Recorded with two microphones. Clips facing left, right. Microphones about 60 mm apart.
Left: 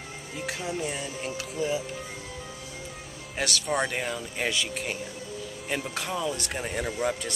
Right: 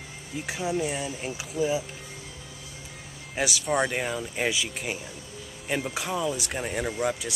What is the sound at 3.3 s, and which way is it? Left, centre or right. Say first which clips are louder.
Speech: right 2 dB; centre.